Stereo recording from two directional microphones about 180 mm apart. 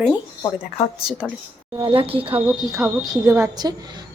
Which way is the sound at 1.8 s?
30° right (ahead or behind).